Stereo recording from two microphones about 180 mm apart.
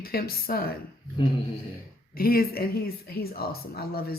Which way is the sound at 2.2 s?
55° left (ahead or behind).